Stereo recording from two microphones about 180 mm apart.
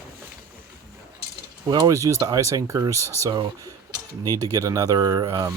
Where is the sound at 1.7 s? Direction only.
20° right (ahead or behind).